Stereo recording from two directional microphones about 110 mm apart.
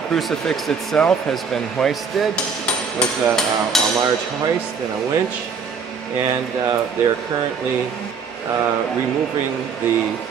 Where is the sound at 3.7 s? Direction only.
5° left (ahead or behind).